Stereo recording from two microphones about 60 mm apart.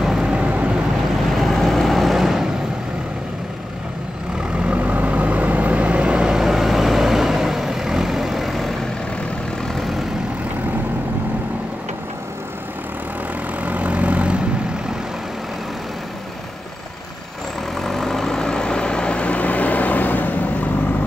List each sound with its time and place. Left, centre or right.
0.0 s vehicle: centre
0.4 s vehicle: right
1.3 s vehicle: centre
4.4 s vehicle: centre
13.6 s vehicle: right
17.7 s vehicle: centre; by 20.7 s left